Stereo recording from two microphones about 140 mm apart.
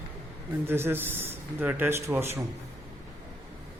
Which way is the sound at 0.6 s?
15° right (ahead or behind).